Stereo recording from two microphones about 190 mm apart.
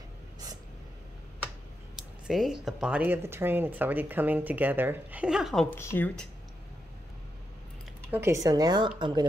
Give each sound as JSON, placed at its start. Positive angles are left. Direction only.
{"t": 2.0, "sound": "speech", "side_deg": 0}
{"t": 5.8, "sound": "speech", "side_deg": 10}
{"t": 8.1, "sound": "speech", "side_deg": -15}